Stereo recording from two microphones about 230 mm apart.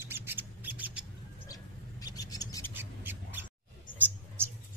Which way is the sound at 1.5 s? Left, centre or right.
Centre.